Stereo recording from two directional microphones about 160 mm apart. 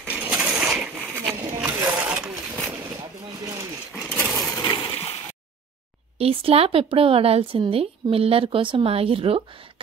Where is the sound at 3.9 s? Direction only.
Centre (ahead or behind).